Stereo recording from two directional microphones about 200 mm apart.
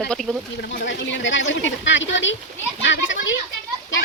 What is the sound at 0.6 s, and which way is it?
A child's voice, 55° left (ahead or behind).